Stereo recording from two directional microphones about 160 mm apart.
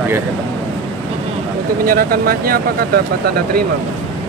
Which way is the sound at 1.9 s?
65° right (ahead or behind).